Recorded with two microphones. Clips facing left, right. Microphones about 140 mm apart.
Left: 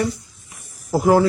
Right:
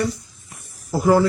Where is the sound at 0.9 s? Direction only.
15° left (ahead or behind).